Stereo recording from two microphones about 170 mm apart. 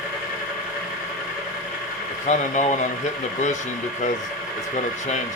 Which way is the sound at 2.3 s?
45° left (ahead or behind).